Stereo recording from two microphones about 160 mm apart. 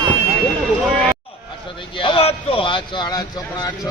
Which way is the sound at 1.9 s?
35° left (ahead or behind).